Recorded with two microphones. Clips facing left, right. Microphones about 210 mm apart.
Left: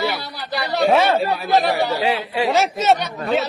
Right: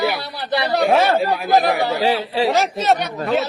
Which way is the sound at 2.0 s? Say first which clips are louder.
Right 2 dB; 25° right (ahead or behind).